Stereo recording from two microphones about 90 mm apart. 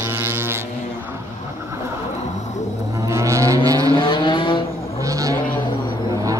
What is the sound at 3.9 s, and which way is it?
Vehicle, 65° left (ahead or behind).